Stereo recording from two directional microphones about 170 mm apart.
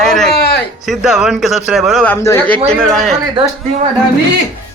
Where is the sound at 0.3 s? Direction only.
75° left (ahead or behind).